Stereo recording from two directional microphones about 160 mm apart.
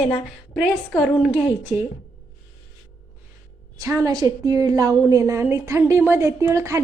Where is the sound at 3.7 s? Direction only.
20° right (ahead or behind).